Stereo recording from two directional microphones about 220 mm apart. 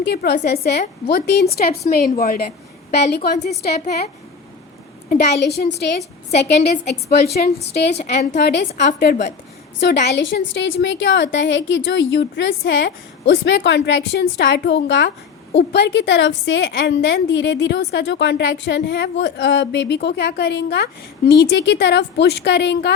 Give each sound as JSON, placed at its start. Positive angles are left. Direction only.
{"t": 0.0, "sound": "a woman's voice", "side_deg": 45}
{"t": 3.6, "sound": "a woman's voice", "side_deg": 45}
{"t": 7.9, "sound": "a woman's voice", "side_deg": 30}
{"t": 8.4, "sound": "a woman's voice", "side_deg": 50}